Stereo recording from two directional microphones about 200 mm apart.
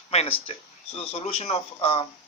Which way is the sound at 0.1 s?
30° left (ahead or behind).